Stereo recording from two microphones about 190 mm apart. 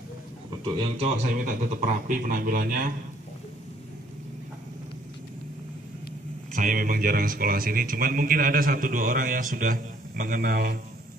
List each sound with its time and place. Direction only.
0.9 s a man's voice: 35° right (ahead or behind)
1.3 s a man's voice: 45° right (ahead or behind)
6.5 s a man's voice: 45° right (ahead or behind)